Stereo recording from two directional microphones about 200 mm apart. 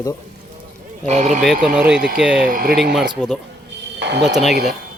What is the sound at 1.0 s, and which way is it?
Speech, 35° right (ahead or behind).